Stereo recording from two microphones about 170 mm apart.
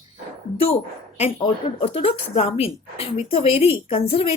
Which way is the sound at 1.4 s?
35° left (ahead or behind).